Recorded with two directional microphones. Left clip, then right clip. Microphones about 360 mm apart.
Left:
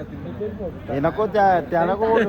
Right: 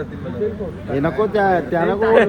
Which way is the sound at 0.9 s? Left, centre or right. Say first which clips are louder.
Right 2 dB; left.